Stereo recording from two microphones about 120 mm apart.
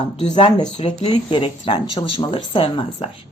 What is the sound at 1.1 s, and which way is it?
A woman's voice, 45° left (ahead or behind).